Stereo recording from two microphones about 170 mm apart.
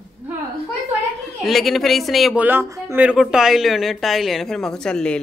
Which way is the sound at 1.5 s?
Centre (ahead or behind).